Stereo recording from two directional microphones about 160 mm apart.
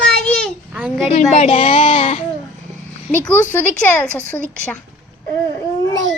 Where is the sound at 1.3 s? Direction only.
50° left (ahead or behind).